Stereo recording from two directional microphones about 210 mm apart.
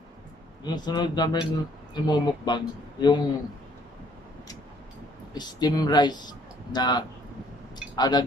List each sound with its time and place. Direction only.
0.7 s speech: 20° left (ahead or behind)
5.3 s speech: 20° left (ahead or behind)